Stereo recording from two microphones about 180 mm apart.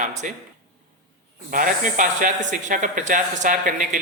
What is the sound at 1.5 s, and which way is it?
Speech, 50° right (ahead or behind).